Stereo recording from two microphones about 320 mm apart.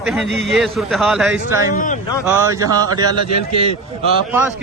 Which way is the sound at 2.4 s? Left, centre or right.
Centre.